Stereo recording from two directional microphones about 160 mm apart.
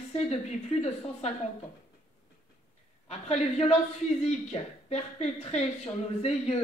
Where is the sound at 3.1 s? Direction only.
40° left (ahead or behind).